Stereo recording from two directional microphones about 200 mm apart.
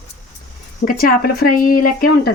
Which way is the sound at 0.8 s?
45° left (ahead or behind).